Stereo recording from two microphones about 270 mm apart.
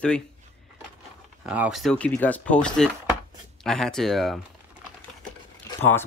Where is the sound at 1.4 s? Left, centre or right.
Centre.